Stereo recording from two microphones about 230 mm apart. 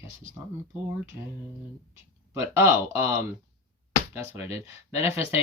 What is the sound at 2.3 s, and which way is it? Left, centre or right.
Speech, centre.